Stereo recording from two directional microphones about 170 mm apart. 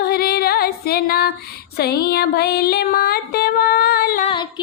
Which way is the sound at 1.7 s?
70° left (ahead or behind).